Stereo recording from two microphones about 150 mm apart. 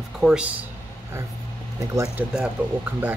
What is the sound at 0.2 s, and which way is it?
Speech, 5° right (ahead or behind).